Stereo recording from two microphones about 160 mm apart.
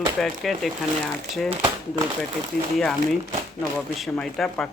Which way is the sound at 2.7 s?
Centre (ahead or behind).